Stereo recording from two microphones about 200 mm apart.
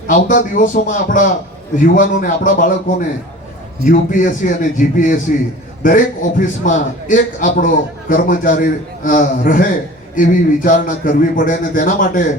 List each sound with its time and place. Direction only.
0.1 s a man's voice: 40° left (ahead or behind)
3.8 s a man's voice: 40° left (ahead or behind)